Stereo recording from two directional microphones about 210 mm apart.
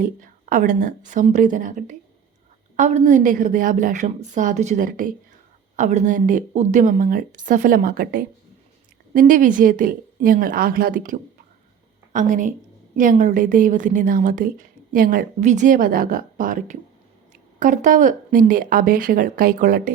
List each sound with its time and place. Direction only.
0.0 s a woman's voice: 40° right (ahead or behind)